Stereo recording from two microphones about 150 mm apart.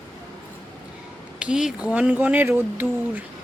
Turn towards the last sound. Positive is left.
turn(degrees=-15)  # may be behind; listen again after turning